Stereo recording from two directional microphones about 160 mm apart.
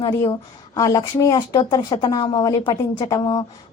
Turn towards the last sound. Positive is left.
turn(degrees=25)  # may be behind; listen again after turning